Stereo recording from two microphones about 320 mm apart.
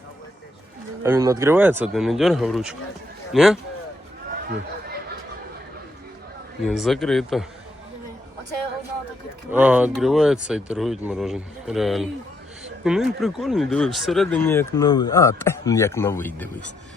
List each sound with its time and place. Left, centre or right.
1.0 s speech: centre
4.4 s chatter: right
6.7 s speech: centre
9.5 s speech: centre